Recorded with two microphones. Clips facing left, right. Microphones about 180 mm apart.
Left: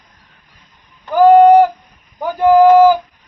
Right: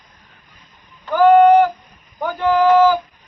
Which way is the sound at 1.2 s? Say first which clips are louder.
Left 3 dB; 40° left (ahead or behind).